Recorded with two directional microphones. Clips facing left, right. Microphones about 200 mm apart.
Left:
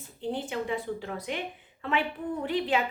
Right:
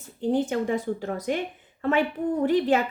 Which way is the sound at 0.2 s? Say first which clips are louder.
Right 8 dB; 45° right (ahead or behind).